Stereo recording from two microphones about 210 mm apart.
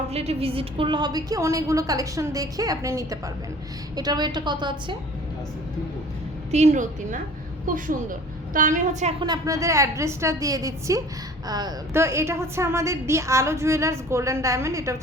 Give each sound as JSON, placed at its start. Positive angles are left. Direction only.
{"t": 0.1, "sound": "a woman's voice", "side_deg": -30}
{"t": 6.5, "sound": "a woman's voice", "side_deg": -35}
{"t": 8.5, "sound": "a woman's voice", "side_deg": -35}
{"t": 9.2, "sound": "a woman's voice", "side_deg": -20}